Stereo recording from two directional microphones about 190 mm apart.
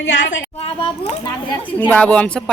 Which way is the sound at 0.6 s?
30° left (ahead or behind).